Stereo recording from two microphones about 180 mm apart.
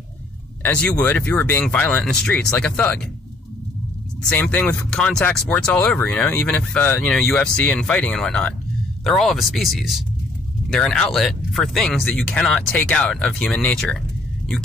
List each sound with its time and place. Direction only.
0.6 s speech: 10° left (ahead or behind)
4.2 s speech: 5° left (ahead or behind)